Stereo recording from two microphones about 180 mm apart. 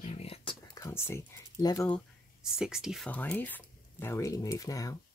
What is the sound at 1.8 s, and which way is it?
Speech, centre (ahead or behind).